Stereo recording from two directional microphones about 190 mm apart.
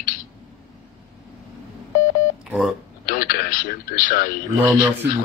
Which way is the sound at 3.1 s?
50° left (ahead or behind).